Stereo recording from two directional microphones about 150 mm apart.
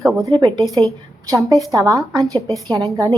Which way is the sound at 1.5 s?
20° right (ahead or behind).